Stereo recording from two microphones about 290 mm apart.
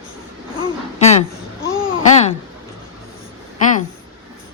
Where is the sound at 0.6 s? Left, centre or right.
Left.